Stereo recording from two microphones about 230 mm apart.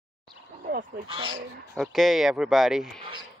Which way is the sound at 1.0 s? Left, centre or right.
Right.